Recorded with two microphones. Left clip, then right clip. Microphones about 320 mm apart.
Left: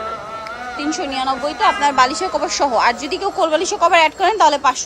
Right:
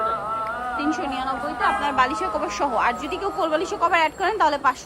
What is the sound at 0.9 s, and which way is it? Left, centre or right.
Speech, centre.